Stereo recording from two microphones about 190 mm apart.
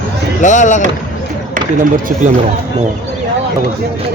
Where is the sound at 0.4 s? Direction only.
40° left (ahead or behind).